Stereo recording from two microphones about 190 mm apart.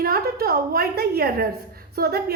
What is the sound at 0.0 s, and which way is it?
A woman's voice, 55° right (ahead or behind).